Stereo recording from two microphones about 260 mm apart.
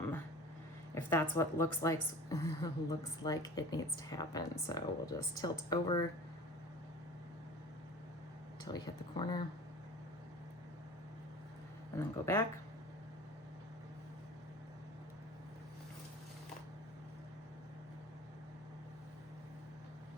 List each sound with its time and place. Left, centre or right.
1.1 s a woman's voice: centre
8.6 s speech: centre
11.9 s a woman's voice: centre